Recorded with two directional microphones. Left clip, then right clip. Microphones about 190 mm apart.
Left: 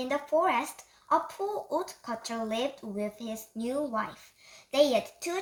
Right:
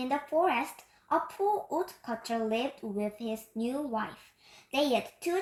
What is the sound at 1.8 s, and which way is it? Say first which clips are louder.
A woman's voice: even; 25° left (ahead or behind).